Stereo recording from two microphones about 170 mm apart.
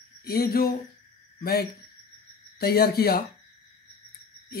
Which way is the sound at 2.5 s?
65° left (ahead or behind).